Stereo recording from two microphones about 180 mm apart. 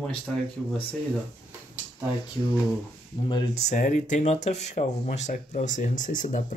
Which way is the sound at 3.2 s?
25° left (ahead or behind).